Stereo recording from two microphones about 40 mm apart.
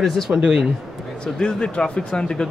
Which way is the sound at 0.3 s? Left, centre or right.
Centre.